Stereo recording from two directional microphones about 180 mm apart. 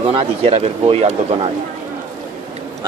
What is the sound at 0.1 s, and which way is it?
Speech, 35° right (ahead or behind).